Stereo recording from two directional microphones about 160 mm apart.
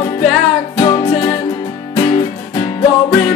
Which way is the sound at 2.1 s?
25° left (ahead or behind).